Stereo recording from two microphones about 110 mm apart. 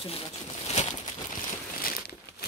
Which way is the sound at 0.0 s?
70° left (ahead or behind).